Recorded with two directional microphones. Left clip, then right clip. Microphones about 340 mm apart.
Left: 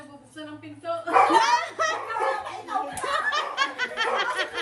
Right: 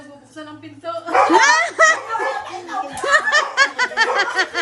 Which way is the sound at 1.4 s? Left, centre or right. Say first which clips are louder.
Right 10 dB; right.